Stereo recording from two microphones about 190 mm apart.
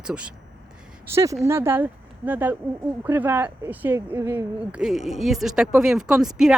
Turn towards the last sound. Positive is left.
turn(degrees=-5)  # may be behind; listen again after turning